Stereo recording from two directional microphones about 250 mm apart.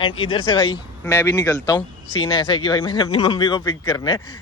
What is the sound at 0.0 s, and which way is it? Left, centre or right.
Speech, centre.